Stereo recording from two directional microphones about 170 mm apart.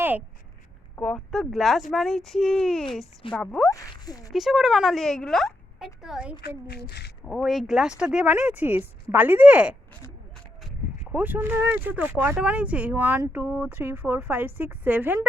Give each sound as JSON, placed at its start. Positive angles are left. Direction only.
{"t": 0.9, "sound": "speech", "side_deg": 5}
{"t": 3.7, "sound": "speech", "side_deg": 20}
{"t": 4.3, "sound": "speech", "side_deg": 0}
{"t": 11.1, "sound": "speech", "side_deg": -10}